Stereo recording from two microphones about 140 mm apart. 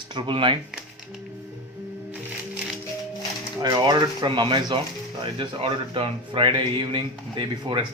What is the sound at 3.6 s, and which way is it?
Speech, 30° right (ahead or behind).